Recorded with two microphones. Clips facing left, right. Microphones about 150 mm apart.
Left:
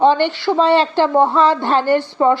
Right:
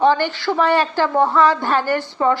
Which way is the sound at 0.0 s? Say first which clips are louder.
Left 3 dB; 20° left (ahead or behind).